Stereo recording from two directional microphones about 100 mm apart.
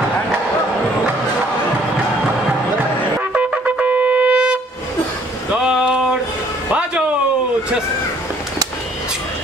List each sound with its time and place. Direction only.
3.2 s wind instrument: 10° right (ahead or behind)
5.5 s a sound: 5° right (ahead or behind)
6.7 s music: 10° right (ahead or behind)